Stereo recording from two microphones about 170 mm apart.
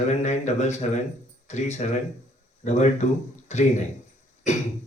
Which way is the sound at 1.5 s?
40° left (ahead or behind).